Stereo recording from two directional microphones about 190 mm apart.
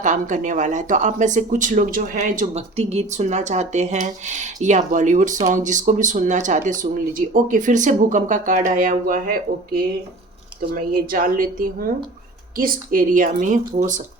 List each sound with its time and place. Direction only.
0.0 s speech: 40° right (ahead or behind)
10.8 s speech: 45° right (ahead or behind)